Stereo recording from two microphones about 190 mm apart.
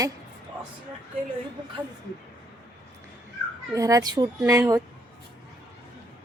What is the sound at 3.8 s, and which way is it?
Speech, 20° right (ahead or behind).